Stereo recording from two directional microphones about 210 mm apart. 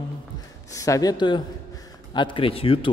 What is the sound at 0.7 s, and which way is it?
A man's voice, 15° left (ahead or behind).